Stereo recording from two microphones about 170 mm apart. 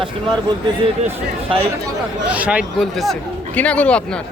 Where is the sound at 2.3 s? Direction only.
5° right (ahead or behind).